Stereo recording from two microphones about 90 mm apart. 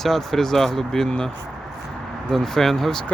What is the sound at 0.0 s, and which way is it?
Speech, 5° left (ahead or behind).